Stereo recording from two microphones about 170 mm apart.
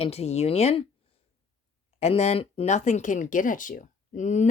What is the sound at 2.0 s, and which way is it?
Speech, 40° left (ahead or behind).